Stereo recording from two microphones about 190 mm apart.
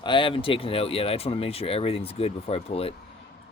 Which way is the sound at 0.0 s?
25° left (ahead or behind).